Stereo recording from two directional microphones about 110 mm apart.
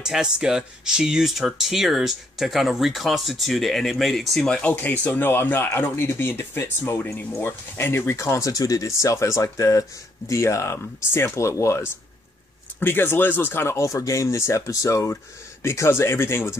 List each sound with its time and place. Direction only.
0.0 s speech: 5° right (ahead or behind); by 16.5 s 25° left (ahead or behind)